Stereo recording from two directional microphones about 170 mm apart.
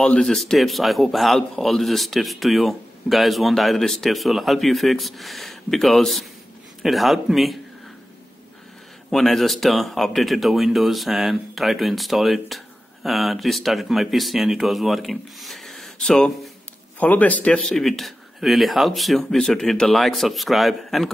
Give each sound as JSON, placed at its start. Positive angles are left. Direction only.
{"t": 0.0, "sound": "speech", "side_deg": 5}
{"t": 9.1, "sound": "speech", "side_deg": 0}